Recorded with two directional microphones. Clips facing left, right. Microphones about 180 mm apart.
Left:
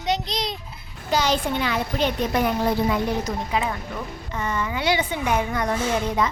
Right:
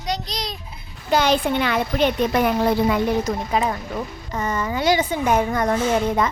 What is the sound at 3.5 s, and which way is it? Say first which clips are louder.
Speech: right 3 dB; 40° right (ahead or behind).